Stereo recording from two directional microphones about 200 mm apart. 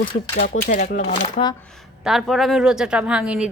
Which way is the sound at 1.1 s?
25° left (ahead or behind).